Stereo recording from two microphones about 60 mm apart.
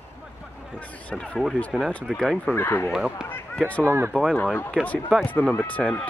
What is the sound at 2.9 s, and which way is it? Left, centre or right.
Speech, centre.